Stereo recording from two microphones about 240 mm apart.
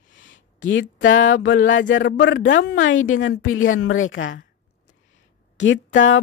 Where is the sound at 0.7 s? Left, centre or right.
Left.